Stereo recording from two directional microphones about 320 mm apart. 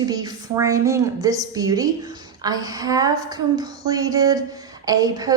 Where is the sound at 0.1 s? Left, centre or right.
Centre.